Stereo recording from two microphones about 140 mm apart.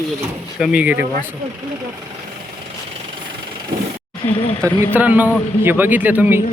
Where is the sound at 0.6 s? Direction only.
10° right (ahead or behind).